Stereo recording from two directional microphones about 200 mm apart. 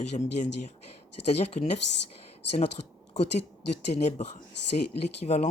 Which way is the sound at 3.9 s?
35° left (ahead or behind).